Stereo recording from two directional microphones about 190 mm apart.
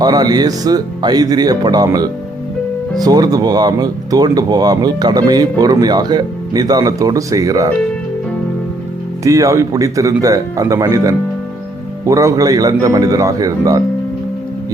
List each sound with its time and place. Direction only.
0.0 s speech: 20° right (ahead or behind)
9.2 s speech: 15° right (ahead or behind)